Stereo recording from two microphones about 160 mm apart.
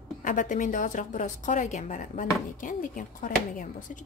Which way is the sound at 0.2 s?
55° left (ahead or behind).